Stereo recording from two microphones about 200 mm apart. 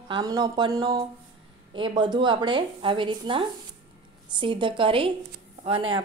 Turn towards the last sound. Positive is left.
turn(degrees=-25)  # may be behind; listen again after turning